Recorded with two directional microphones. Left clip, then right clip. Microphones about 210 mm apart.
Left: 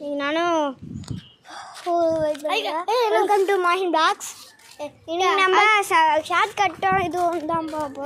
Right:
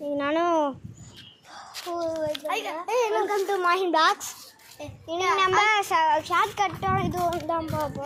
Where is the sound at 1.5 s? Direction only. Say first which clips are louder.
Left 9 dB; 40° left (ahead or behind).